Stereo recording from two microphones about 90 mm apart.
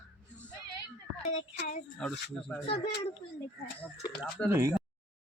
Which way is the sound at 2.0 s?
10° left (ahead or behind).